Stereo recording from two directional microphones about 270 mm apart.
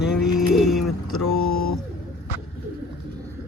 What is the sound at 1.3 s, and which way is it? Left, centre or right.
Speech, left.